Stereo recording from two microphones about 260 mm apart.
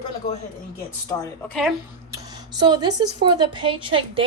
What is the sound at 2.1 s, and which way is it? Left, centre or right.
Speech, centre.